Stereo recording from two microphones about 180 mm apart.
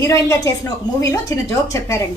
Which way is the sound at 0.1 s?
20° left (ahead or behind).